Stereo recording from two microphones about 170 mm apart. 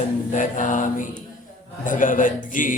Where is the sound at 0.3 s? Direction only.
50° left (ahead or behind).